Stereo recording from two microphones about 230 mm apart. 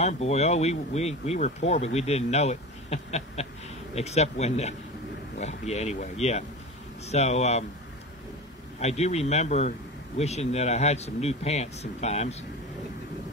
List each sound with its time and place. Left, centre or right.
0.0 s speech: left
8.7 s speech: left